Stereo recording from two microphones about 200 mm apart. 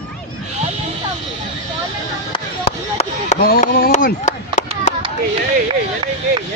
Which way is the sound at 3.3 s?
45° left (ahead or behind).